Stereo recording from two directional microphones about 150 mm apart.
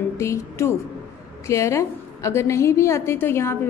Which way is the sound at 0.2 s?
20° left (ahead or behind).